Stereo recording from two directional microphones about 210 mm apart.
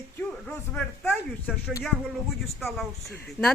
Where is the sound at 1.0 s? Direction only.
5° left (ahead or behind).